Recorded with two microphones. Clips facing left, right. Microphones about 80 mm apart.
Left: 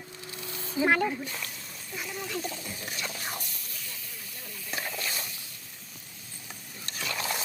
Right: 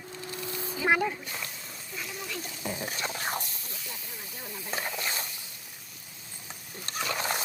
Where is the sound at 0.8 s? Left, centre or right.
Left.